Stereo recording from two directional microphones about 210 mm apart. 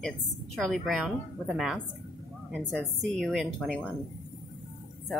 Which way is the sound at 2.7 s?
Centre (ahead or behind).